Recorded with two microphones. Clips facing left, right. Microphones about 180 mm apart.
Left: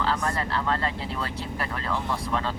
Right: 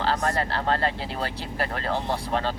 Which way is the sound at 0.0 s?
35° right (ahead or behind).